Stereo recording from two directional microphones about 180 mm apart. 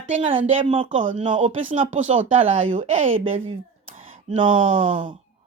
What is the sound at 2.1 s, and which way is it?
Speech, 35° right (ahead or behind).